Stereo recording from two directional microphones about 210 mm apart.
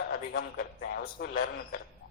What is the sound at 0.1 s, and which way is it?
A man's voice, 45° left (ahead or behind).